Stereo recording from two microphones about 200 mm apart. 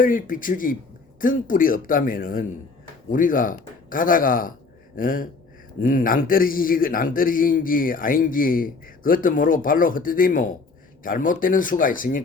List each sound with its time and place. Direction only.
0.0 s speech: 45° left (ahead or behind)